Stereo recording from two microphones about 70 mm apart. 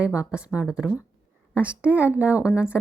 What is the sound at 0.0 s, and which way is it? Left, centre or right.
A woman's voice, centre.